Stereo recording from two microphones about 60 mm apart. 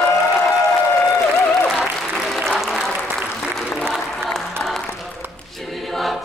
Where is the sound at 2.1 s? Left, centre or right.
Centre.